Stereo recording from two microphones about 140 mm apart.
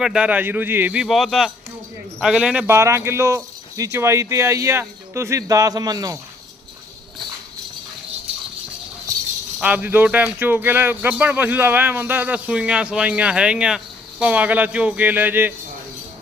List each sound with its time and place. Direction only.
0.0 s speech: 5° right (ahead or behind)
1.0 s speech: centre (ahead or behind)
2.6 s speech: 20° right (ahead or behind)
9.6 s speech: 10° right (ahead or behind)